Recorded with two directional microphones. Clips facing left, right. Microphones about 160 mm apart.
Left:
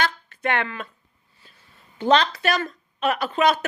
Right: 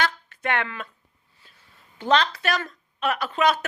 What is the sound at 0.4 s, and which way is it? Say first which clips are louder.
Speech: left 2 dB; 5° right (ahead or behind).